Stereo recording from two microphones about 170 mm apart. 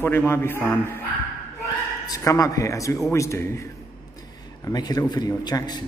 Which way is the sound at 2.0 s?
20° left (ahead or behind).